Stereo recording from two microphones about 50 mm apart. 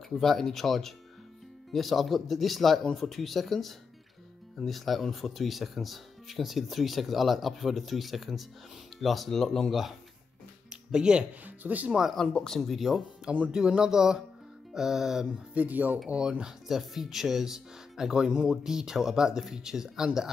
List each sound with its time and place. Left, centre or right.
0.1 s speech: centre
10.9 s speech: centre
11.4 s speech: right
12.2 s speech: centre
12.5 s speech: centre
13.5 s speech: centre
15.5 s speech: right
16.1 s speech: centre